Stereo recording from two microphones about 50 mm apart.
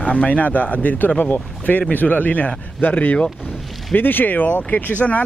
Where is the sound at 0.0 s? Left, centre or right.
Left.